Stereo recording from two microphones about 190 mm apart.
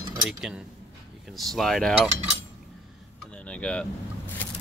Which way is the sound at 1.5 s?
Centre (ahead or behind).